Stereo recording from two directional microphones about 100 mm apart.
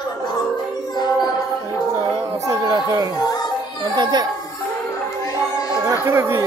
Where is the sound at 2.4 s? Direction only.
40° right (ahead or behind).